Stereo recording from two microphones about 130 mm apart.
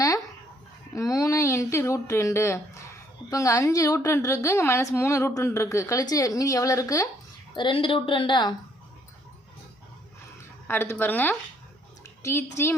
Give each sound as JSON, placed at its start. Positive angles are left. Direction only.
{"t": 0.9, "sound": "speech", "side_deg": 25}
{"t": 7.5, "sound": "a woman's voice", "side_deg": 40}
{"t": 10.7, "sound": "a woman's voice", "side_deg": 15}